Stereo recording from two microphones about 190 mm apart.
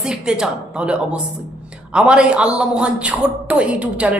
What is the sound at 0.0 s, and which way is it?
A man's voice, 5° right (ahead or behind).